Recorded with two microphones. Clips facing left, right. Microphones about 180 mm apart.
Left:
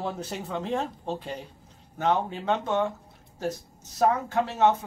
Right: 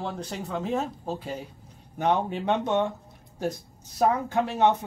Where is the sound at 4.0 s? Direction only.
15° right (ahead or behind).